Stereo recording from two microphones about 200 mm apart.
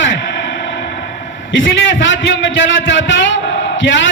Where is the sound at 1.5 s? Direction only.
70° left (ahead or behind).